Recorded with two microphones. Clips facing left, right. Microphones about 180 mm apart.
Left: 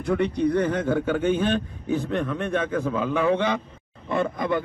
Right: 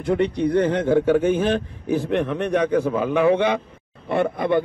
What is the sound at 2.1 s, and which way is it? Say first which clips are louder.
A man's voice: right 4 dB; 20° right (ahead or behind).